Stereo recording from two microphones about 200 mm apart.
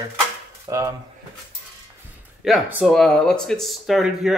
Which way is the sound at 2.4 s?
Centre (ahead or behind).